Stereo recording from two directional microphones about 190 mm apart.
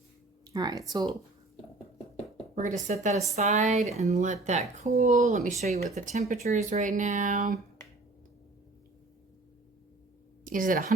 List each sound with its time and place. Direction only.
0.4 s speech: 20° right (ahead or behind)
2.8 s speech: 40° right (ahead or behind)
10.4 s a woman's voice: 45° right (ahead or behind)